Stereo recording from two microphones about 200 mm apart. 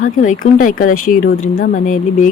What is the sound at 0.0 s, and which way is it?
Speech, 40° left (ahead or behind).